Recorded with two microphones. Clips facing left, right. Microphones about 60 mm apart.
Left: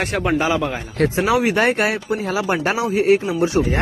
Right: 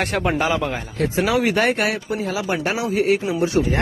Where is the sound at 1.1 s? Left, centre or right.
Left.